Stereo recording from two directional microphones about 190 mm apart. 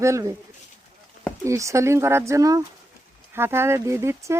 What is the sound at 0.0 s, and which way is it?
Speech, 15° right (ahead or behind).